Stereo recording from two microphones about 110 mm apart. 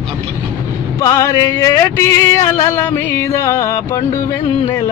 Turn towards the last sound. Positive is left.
turn(degrees=25)  # may be behind; listen again after turning